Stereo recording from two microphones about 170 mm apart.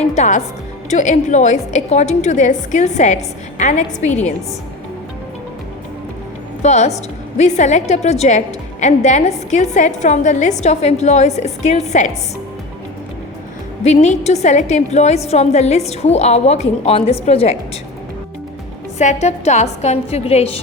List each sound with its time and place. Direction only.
0.0 s a woman's voice: 40° left (ahead or behind)
6.6 s a woman's voice: 40° left (ahead or behind)
13.8 s a woman's voice: 40° left (ahead or behind)
18.9 s a woman's voice: 40° left (ahead or behind)